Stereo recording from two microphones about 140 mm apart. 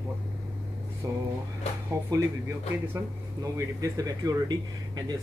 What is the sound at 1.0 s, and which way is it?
Speech, 20° right (ahead or behind).